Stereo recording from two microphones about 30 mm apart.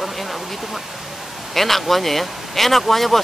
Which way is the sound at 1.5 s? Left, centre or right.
Centre.